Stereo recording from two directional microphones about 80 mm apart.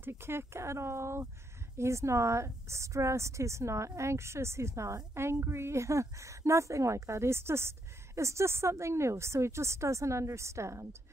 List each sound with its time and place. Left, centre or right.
0.0 s a woman's voice: right